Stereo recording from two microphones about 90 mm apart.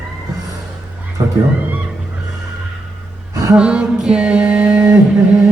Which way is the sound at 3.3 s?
40° right (ahead or behind).